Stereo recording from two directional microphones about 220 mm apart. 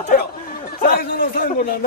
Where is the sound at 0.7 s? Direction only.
45° left (ahead or behind).